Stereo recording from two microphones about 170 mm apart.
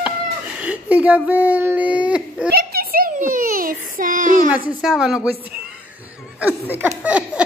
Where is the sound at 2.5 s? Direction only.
65° right (ahead or behind).